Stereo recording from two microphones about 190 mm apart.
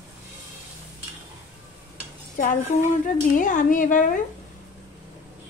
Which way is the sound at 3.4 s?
45° left (ahead or behind).